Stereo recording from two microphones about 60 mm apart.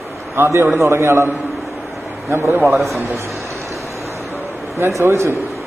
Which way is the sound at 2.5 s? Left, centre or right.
Right.